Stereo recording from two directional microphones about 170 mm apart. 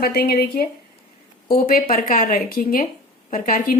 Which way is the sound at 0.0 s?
60° left (ahead or behind).